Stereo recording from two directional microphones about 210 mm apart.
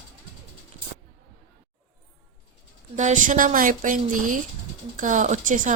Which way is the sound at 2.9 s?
35° right (ahead or behind).